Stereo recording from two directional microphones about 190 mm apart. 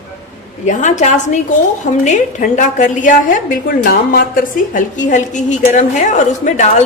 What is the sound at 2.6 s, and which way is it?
A woman's voice, 40° left (ahead or behind).